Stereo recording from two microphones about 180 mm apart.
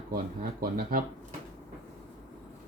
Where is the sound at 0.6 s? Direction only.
55° right (ahead or behind).